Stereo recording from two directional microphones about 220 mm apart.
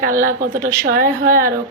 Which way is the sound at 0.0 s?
40° right (ahead or behind).